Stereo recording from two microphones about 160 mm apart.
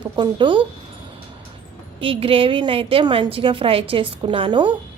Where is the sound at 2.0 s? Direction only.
35° right (ahead or behind).